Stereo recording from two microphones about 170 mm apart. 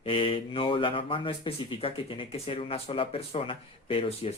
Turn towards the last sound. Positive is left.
turn(degrees=35)  # may be behind; listen again after turning